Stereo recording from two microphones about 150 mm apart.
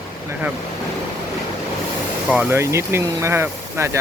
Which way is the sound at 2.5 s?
20° right (ahead or behind).